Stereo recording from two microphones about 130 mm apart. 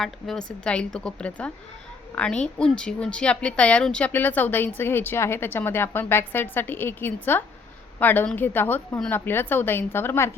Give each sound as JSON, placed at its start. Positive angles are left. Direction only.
{"t": 0.0, "sound": "a woman's voice", "side_deg": 5}